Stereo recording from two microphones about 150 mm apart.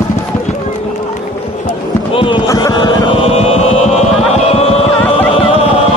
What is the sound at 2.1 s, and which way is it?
Run, 35° left (ahead or behind).